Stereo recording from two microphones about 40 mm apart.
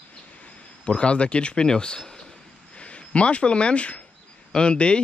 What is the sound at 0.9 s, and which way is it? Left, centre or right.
Speech, left.